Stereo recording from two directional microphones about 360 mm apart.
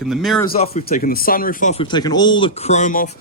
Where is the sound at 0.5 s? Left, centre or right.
Centre.